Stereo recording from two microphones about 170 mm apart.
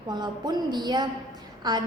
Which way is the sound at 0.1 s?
25° right (ahead or behind).